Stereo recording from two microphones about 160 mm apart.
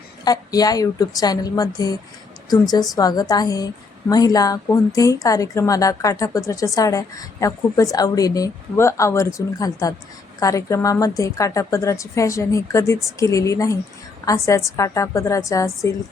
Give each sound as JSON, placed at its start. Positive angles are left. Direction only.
{"t": 0.3, "sound": "speech", "side_deg": 25}